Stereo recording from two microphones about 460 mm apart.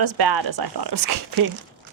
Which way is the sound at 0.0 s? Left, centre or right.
Right.